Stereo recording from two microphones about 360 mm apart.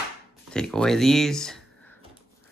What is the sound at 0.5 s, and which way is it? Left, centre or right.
Speech, centre.